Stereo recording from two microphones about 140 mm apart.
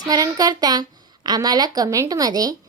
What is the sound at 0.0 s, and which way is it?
A woman's voice, 25° right (ahead or behind).